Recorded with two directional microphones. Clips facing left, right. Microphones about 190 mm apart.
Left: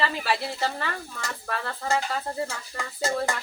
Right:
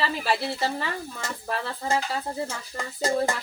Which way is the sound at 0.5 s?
20° right (ahead or behind).